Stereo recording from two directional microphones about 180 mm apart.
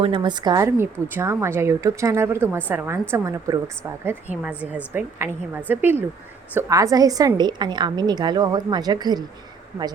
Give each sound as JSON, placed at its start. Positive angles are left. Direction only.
{"t": 0.0, "sound": "a woman's voice", "side_deg": -25}